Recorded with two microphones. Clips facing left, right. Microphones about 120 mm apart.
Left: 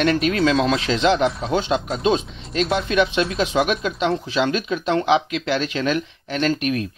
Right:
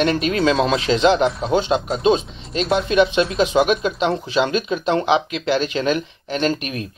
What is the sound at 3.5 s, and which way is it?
Speech, 40° right (ahead or behind).